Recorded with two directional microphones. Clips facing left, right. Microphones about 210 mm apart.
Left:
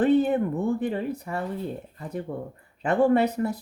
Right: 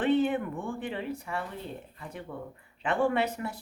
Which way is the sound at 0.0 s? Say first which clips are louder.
Left 5 dB; 40° left (ahead or behind).